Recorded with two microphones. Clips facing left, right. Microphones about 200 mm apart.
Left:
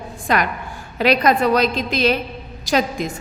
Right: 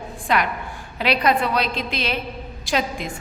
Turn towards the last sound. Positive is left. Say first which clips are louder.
# left 4 dB
turn(degrees=40)  # may be behind; listen again after turning